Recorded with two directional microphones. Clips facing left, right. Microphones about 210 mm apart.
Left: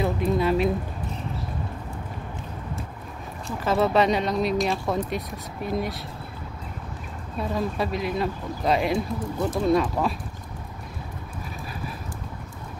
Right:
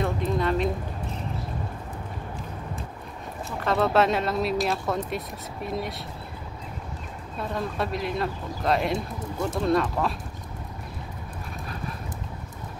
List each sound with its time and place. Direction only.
0.0 s a sound: 5° left (ahead or behind)
3.4 s speech: centre (ahead or behind)
7.3 s speech: centre (ahead or behind)